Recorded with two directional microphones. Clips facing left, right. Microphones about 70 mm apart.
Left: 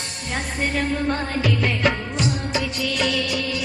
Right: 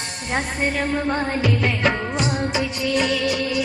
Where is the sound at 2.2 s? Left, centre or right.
Right.